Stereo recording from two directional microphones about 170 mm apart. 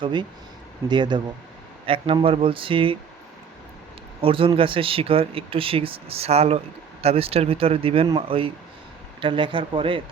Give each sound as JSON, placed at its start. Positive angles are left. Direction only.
{"t": 0.0, "sound": "speech", "side_deg": -25}
{"t": 4.2, "sound": "speech", "side_deg": -30}